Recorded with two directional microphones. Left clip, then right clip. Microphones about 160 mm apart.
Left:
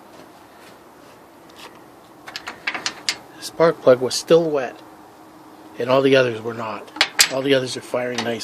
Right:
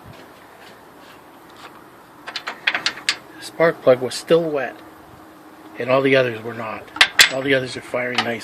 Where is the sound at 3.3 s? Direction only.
15° left (ahead or behind).